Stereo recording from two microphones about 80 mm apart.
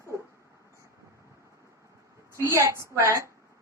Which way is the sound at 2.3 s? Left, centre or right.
Right.